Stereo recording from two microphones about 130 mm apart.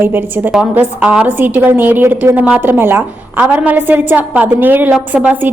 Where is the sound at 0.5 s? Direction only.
10° right (ahead or behind).